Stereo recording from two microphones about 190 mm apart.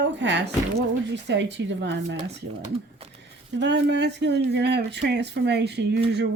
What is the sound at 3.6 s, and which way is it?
Speech, 70° right (ahead or behind).